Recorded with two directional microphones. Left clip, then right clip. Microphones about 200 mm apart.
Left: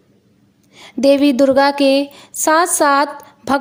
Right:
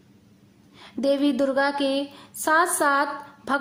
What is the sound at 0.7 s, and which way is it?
A woman's voice, 35° left (ahead or behind).